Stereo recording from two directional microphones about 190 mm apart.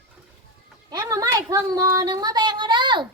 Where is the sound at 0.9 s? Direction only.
20° right (ahead or behind).